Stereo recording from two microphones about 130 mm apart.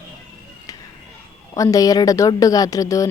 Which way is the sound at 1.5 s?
25° left (ahead or behind).